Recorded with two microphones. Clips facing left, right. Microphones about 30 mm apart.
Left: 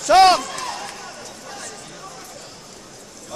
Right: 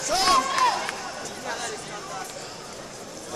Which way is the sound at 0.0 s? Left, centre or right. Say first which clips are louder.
Left 9 dB; left.